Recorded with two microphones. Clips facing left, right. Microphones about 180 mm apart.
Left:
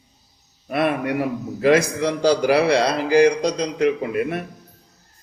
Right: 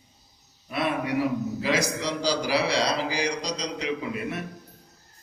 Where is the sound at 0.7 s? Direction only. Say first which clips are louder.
Left 5 dB; 55° left (ahead or behind).